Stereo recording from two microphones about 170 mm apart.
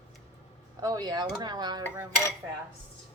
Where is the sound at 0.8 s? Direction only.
20° right (ahead or behind).